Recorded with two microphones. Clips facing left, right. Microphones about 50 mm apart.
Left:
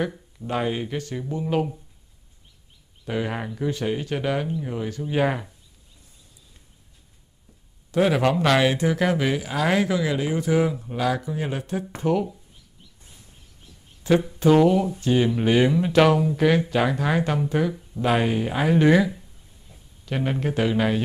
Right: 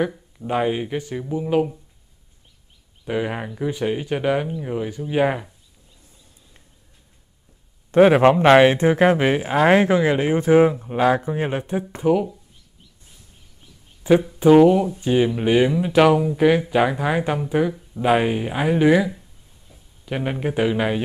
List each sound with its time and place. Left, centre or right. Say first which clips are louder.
0.4 s speech: right 4 dB; centre
3.1 s speech: right 3 dB; centre
7.9 s speech: right 7 dB; right
12.0 s speech: right 4 dB; centre
14.0 s speech: right 4 dB; centre